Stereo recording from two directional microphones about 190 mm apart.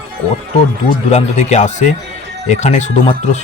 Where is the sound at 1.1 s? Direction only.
35° left (ahead or behind).